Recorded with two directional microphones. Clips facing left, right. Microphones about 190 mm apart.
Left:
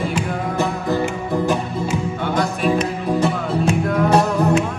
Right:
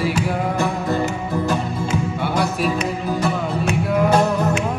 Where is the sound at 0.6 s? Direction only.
15° left (ahead or behind).